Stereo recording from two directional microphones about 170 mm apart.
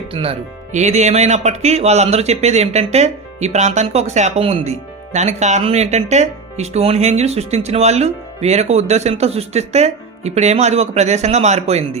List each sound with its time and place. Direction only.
0.1 s speech: 35° right (ahead or behind)